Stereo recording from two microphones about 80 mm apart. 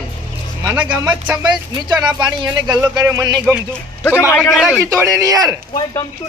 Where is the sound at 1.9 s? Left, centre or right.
Right.